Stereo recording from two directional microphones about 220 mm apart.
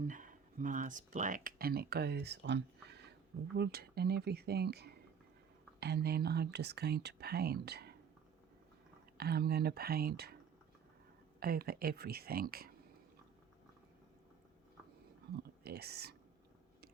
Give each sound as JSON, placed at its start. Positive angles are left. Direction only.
{"t": 0.0, "sound": "speech", "side_deg": -35}
{"t": 9.1, "sound": "speech", "side_deg": -45}
{"t": 11.3, "sound": "speech", "side_deg": -45}
{"t": 15.6, "sound": "speech", "side_deg": -45}